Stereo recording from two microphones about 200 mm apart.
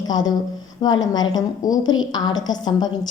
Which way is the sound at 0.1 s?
20° left (ahead or behind).